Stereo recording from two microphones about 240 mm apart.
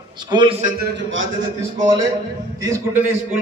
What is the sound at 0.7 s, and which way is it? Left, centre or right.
Speech, right.